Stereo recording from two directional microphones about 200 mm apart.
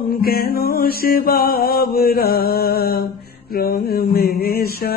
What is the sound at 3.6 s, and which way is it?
Mantra, 50° left (ahead or behind).